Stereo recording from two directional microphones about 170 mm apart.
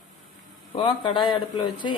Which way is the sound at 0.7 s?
30° left (ahead or behind).